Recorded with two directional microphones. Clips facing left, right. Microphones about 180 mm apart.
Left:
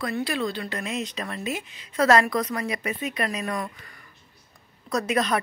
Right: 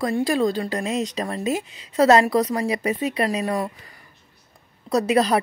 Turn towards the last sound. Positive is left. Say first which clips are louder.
# right 5 dB
turn(degrees=-30)  # may be behind; listen again after turning